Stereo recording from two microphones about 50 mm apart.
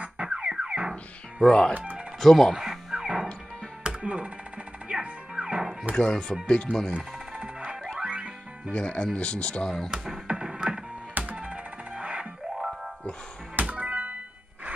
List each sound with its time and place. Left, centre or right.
0.0 s music: right
1.4 s speech: centre
2.1 s speech: centre
2.6 s music: centre
3.8 s music: right
5.9 s speech: centre
8.0 s music: right
8.7 s speech: centre
9.8 s speech: centre
10.2 s music: centre
11.1 s music: right
13.6 s music: right